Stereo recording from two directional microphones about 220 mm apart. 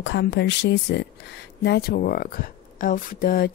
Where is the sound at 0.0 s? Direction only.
50° left (ahead or behind).